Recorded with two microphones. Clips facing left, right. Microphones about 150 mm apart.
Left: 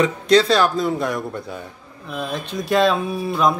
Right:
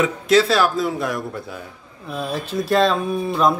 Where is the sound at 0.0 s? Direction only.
5° right (ahead or behind).